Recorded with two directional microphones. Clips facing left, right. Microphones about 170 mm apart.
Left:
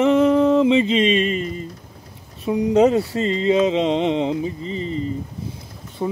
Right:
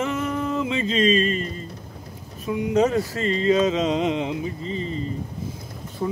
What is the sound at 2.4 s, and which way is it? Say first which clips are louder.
Speech: left 5 dB; 35° left (ahead or behind).